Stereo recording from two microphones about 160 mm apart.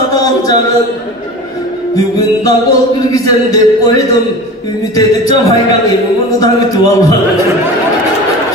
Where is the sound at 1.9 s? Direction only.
20° left (ahead or behind).